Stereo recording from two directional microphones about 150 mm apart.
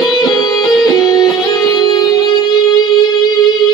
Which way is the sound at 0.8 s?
25° left (ahead or behind).